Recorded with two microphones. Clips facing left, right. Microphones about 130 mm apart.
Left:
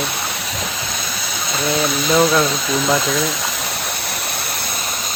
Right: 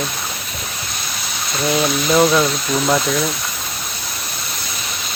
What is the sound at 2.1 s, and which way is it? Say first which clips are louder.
Speech: right 1 dB; centre (ahead or behind).